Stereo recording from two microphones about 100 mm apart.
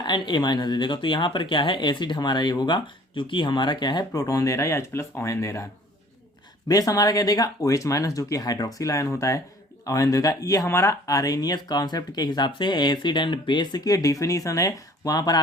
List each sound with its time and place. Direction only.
0.0 s speech: 50° left (ahead or behind); by 5.6 s 30° left (ahead or behind)
6.7 s speech: 35° left (ahead or behind)